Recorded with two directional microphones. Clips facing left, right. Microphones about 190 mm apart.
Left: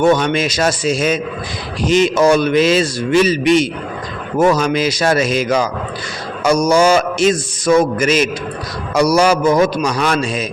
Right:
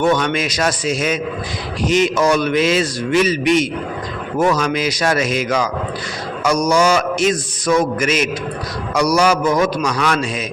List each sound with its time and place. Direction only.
0.0 s a man's voice: 30° left (ahead or behind)